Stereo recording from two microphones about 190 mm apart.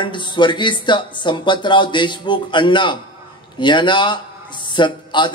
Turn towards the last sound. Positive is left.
turn(degrees=25)  # may be behind; listen again after turning